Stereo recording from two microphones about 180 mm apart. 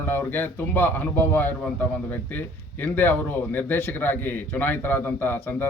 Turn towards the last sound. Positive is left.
turn(degrees=10)  # may be behind; listen again after turning